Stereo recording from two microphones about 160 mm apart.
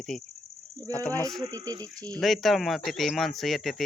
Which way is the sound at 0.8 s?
20° right (ahead or behind).